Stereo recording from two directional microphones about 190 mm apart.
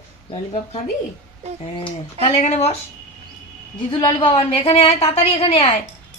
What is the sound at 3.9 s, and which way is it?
A woman's voice, 25° left (ahead or behind).